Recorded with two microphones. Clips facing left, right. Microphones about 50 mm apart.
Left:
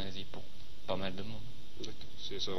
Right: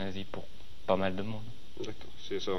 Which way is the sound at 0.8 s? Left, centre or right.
Right.